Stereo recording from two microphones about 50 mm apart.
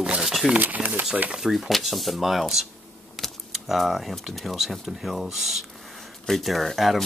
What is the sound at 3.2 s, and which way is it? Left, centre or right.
Keys jangling, centre.